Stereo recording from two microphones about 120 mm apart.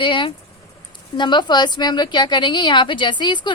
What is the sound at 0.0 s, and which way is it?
A woman's voice, 45° left (ahead or behind).